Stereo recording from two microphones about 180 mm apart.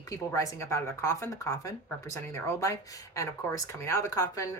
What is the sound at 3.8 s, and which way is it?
Speech, 15° left (ahead or behind).